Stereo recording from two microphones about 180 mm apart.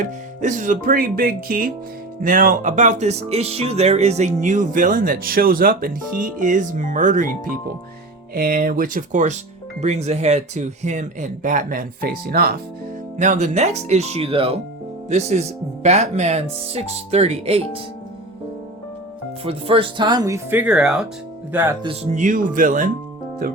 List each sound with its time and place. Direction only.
0.4 s speech: 45° right (ahead or behind)
13.1 s speech: 40° right (ahead or behind)
19.5 s speech: 30° right (ahead or behind); by 21.8 s 10° right (ahead or behind)
21.8 s speech: 40° right (ahead or behind)